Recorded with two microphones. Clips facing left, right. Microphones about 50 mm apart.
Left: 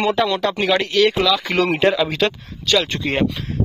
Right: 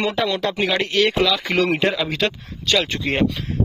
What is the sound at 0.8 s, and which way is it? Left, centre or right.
Speech, right.